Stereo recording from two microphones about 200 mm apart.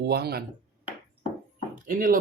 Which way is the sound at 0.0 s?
55° right (ahead or behind).